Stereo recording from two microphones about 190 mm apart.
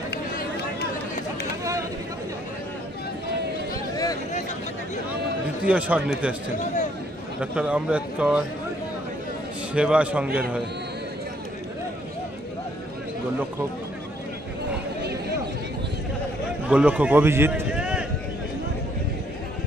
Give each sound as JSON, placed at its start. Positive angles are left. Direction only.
{"t": 0.1, "sound": "run", "side_deg": 50}
{"t": 3.9, "sound": "a sound", "side_deg": 20}
{"t": 5.7, "sound": "a man's voice", "side_deg": -5}
{"t": 6.6, "sound": "a sound", "side_deg": 40}
{"t": 7.5, "sound": "speech", "side_deg": -5}
{"t": 9.8, "sound": "a man's voice", "side_deg": -5}
{"t": 16.6, "sound": "a man's voice", "side_deg": -5}